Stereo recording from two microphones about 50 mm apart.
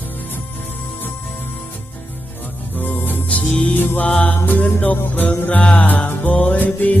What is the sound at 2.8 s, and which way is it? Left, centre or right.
Music, left.